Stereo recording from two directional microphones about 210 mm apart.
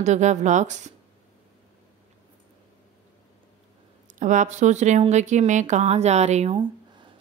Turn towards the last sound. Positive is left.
turn(degrees=-25)  # may be behind; listen again after turning